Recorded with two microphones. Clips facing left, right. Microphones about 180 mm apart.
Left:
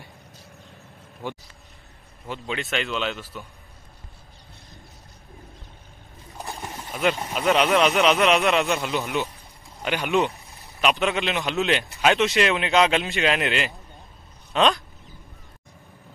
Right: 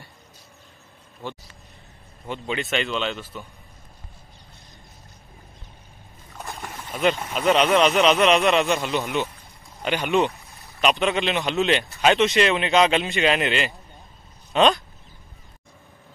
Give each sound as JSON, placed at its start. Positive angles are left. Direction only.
{"t": 1.2, "sound": "speech", "side_deg": 15}
{"t": 2.2, "sound": "a man's voice", "side_deg": 0}
{"t": 6.4, "sound": "boat", "side_deg": 15}
{"t": 6.9, "sound": "a man's voice", "side_deg": 5}